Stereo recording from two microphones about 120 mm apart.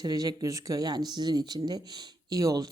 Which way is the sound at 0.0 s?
30° right (ahead or behind).